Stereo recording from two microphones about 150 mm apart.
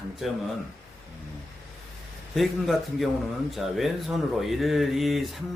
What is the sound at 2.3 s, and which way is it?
Speech, centre (ahead or behind).